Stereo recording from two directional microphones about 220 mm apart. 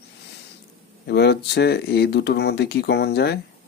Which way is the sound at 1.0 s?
50° left (ahead or behind).